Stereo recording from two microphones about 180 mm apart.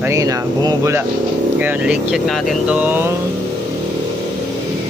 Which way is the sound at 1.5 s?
10° right (ahead or behind).